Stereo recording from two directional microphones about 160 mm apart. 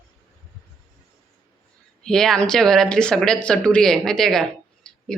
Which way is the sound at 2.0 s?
5° left (ahead or behind).